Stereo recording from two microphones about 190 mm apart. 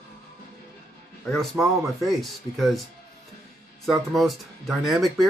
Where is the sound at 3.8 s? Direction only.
Centre (ahead or behind).